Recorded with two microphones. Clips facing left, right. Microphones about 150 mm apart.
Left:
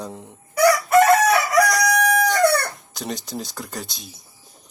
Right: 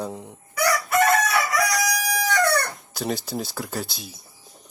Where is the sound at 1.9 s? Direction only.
50° left (ahead or behind).